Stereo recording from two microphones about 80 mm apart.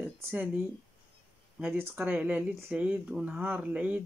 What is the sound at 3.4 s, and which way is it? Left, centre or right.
Speech, right.